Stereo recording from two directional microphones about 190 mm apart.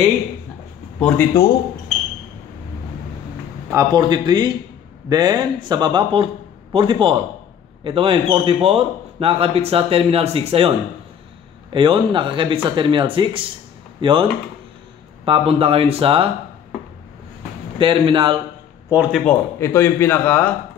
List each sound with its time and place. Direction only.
0.9 s speech: 10° left (ahead or behind)
3.7 s a man's voice: 20° right (ahead or behind)
11.7 s a man's voice: 25° right (ahead or behind)
17.7 s a man's voice: 25° right (ahead or behind)
18.9 s speech: 10° right (ahead or behind)
19.2 s speech: 15° left (ahead or behind)